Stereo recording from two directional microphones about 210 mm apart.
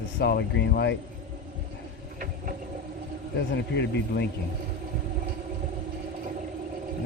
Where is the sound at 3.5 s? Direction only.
55° left (ahead or behind).